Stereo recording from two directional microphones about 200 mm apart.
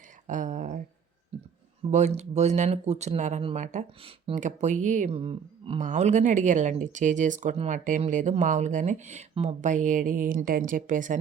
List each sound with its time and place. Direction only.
0.3 s speech: 40° right (ahead or behind)
1.9 s speech: 35° right (ahead or behind)